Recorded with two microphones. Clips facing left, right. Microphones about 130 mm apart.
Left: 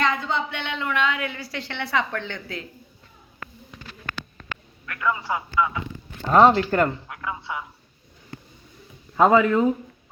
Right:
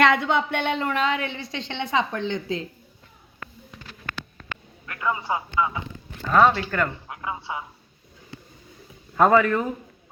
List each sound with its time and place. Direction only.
0.0 s a woman's voice: 70° right (ahead or behind); by 2.6 s 20° right (ahead or behind)
4.9 s a man's voice: 25° right (ahead or behind)
6.2 s speech: 35° left (ahead or behind)
7.1 s a woman's voice: 25° right (ahead or behind)
9.1 s speech: 15° left (ahead or behind)